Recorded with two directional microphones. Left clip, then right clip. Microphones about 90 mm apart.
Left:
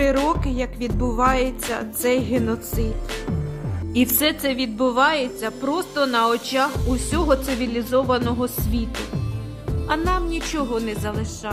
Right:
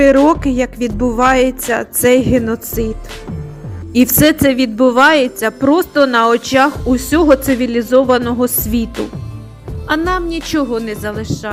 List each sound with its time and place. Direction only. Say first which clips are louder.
0.3 s speech: right 10 dB; 50° right (ahead or behind)
3.9 s a woman's voice: right 10 dB; 50° right (ahead or behind)
8.4 s a woman's voice: right 9 dB; 60° right (ahead or behind)
9.8 s a woman's voice: right 7 dB; 45° right (ahead or behind)